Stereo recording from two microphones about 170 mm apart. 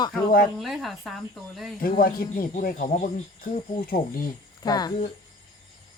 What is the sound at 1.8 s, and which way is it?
Speech, 60° left (ahead or behind).